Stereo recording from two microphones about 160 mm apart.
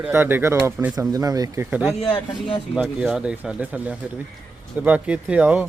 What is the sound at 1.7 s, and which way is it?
Speech, 5° right (ahead or behind).